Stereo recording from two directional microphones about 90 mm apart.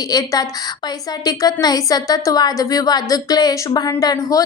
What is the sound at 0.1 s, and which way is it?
A woman's voice, 40° left (ahead or behind).